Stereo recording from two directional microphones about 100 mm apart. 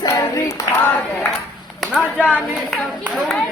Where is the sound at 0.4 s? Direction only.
30° left (ahead or behind).